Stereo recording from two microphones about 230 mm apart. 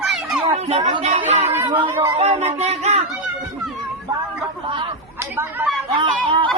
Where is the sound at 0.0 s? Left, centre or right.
Centre.